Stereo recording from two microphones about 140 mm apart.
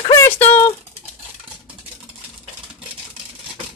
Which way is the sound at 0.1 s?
20° left (ahead or behind).